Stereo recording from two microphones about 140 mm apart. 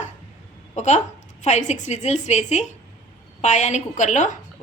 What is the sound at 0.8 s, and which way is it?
A woman's voice, 60° left (ahead or behind).